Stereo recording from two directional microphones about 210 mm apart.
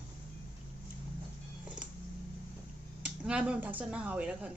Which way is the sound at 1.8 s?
5° right (ahead or behind).